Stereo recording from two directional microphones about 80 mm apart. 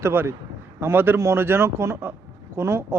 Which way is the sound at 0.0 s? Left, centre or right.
Right.